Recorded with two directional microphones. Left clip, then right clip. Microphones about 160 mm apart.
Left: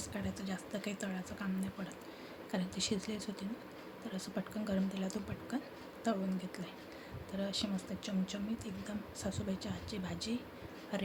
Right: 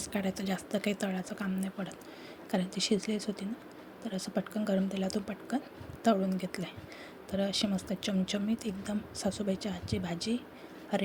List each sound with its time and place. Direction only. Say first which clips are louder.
0.0 s speech: right 8 dB; 40° right (ahead or behind)
6.0 s speech: right 9 dB; 40° right (ahead or behind)